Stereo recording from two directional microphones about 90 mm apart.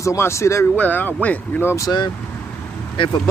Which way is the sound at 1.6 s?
35° left (ahead or behind).